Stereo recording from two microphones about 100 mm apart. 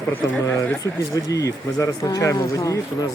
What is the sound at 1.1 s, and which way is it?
Speech, 35° left (ahead or behind).